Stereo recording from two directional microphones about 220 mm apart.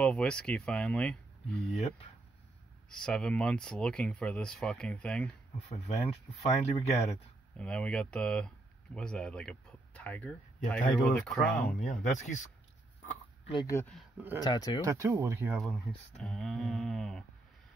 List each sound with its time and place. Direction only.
0.0 s speech: 5° left (ahead or behind)
2.9 s speech: 5° left (ahead or behind)
5.7 s speech: 30° left (ahead or behind)
7.5 s speech: 5° left (ahead or behind)
11.8 s speech: 35° left (ahead or behind)
13.5 s speech: 15° left (ahead or behind)
13.9 s speech: 5° right (ahead or behind)
14.4 s speech: 20° left (ahead or behind)
14.8 s speech: 15° right (ahead or behind); by 17.2 s centre (ahead or behind)